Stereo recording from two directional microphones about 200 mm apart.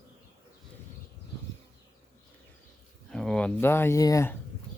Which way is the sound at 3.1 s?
5° left (ahead or behind).